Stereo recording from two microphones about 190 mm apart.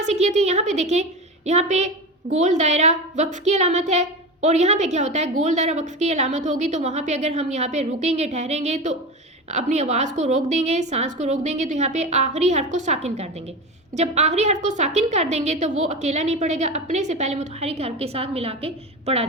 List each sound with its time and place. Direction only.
0.0 s a woman's voice: 35° right (ahead or behind)